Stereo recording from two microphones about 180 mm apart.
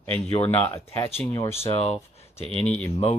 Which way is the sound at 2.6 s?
5° left (ahead or behind).